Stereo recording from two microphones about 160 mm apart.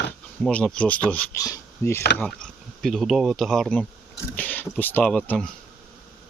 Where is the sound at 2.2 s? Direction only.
5° left (ahead or behind).